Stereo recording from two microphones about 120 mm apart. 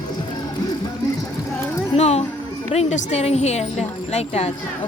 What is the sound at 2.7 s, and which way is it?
Speech, 70° left (ahead or behind).